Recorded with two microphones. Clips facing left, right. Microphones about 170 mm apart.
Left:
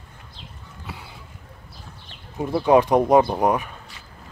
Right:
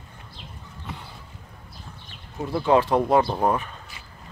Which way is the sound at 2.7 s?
15° left (ahead or behind).